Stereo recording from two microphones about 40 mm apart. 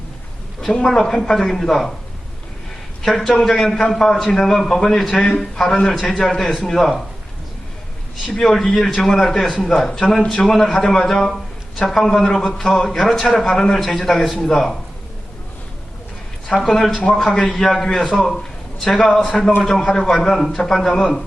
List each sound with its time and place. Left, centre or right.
0.9 s a man's voice: centre
3.0 s a man's voice: centre
8.3 s a man's voice: centre
16.6 s a man's voice: centre
20.2 s a man's voice: centre